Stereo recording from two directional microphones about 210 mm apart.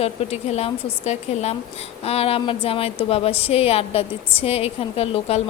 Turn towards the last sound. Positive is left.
turn(degrees=30)  # may be behind; listen again after turning